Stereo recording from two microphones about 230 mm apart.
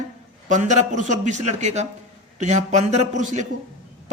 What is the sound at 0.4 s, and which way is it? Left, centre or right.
A man's voice, right.